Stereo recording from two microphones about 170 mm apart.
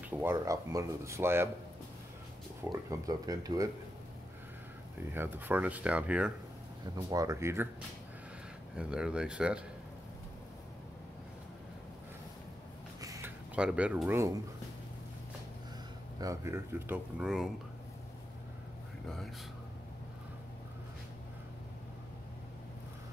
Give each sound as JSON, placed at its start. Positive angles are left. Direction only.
{"t": 0.0, "sound": "speech", "side_deg": -10}
{"t": 2.7, "sound": "speech", "side_deg": -20}
{"t": 5.1, "sound": "speech", "side_deg": -10}
{"t": 6.8, "sound": "speech", "side_deg": -20}
{"t": 8.7, "sound": "speech", "side_deg": -5}
{"t": 13.0, "sound": "a sound", "side_deg": -20}
{"t": 13.6, "sound": "speech", "side_deg": -5}
{"t": 16.2, "sound": "speech", "side_deg": -20}